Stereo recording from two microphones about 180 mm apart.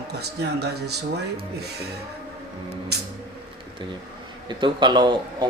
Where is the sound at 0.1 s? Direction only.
65° right (ahead or behind).